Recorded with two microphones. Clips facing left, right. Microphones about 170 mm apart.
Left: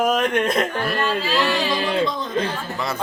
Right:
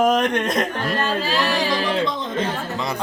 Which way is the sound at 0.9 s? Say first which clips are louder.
Even; 40° right (ahead or behind).